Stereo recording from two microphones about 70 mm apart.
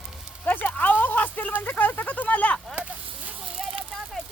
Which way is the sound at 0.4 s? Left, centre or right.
Left.